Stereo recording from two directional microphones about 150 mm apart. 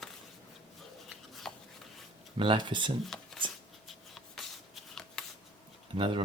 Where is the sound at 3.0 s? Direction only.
5° left (ahead or behind).